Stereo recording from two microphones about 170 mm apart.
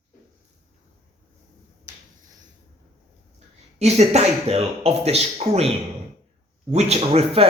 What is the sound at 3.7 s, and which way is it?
Speech, 40° right (ahead or behind).